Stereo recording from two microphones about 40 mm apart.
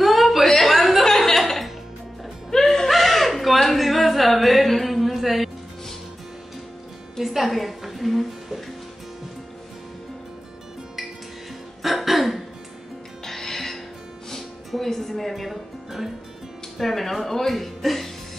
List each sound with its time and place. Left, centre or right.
0.0 s chuckle: centre
2.5 s a sound: centre
7.2 s music: centre
11.8 s throat clearing: centre
13.2 s music: centre
16.7 s a woman's voice: centre